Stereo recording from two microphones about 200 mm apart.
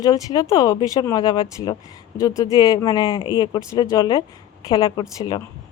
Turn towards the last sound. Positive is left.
turn(degrees=20)  # may be behind; listen again after turning